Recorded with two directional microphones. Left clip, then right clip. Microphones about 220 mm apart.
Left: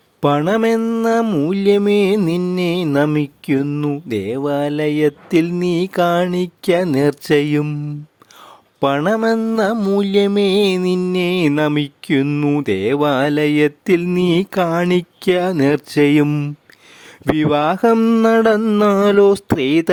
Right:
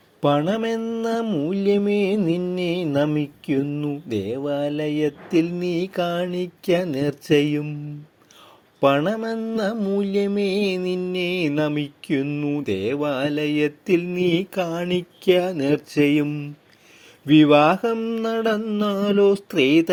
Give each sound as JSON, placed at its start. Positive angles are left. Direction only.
{"t": 0.2, "sound": "speech", "side_deg": 35}
{"t": 8.8, "sound": "speech", "side_deg": 35}